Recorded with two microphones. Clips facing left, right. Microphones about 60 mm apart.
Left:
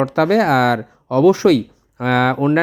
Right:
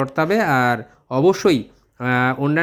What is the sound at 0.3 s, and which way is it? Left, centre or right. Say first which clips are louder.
Speech: left 2 dB; left.